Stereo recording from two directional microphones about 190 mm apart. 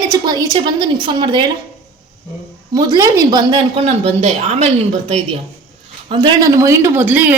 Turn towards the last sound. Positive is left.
turn(degrees=-10)  # may be behind; listen again after turning